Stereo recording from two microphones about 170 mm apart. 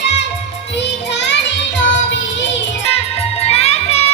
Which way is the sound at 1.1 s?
90° left.